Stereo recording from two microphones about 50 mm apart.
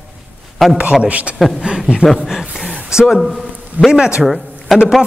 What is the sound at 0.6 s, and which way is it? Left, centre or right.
Speech, centre.